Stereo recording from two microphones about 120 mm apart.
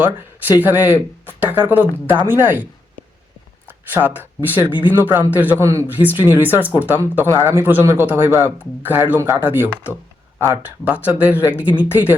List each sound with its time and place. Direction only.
0.0 s speech: 15° right (ahead or behind)
3.9 s speech: 15° right (ahead or behind)
6.6 s speech: 15° left (ahead or behind)
6.8 s speech: 15° right (ahead or behind)